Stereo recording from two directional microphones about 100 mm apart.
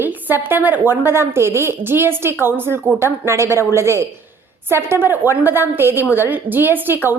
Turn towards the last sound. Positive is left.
turn(degrees=-20)  # may be behind; listen again after turning